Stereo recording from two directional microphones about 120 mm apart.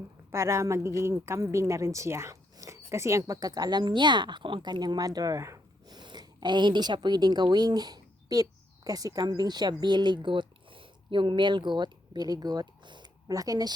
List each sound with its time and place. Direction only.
0.3 s speech: 20° right (ahead or behind)